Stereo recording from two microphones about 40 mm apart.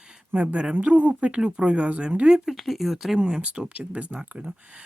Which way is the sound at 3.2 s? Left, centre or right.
Centre.